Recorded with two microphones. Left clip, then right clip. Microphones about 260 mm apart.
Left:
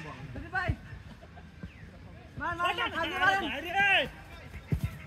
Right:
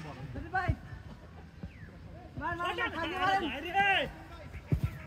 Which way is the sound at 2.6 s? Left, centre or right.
Centre.